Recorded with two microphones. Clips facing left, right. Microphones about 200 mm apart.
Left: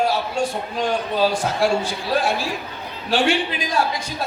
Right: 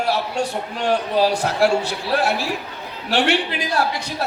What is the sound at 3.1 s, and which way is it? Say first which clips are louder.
Speech: even; 70° right (ahead or behind).